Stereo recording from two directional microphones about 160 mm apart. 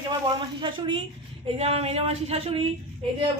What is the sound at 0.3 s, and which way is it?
Speech, 30° right (ahead or behind).